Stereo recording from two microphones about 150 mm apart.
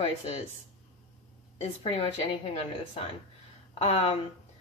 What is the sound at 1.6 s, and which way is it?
Speech, 45° left (ahead or behind).